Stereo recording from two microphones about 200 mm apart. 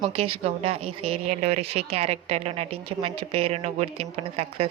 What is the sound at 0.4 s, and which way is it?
Speech, 30° right (ahead or behind).